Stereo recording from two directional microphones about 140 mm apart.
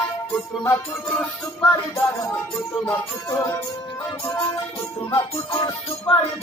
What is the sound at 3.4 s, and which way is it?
Music, 15° left (ahead or behind).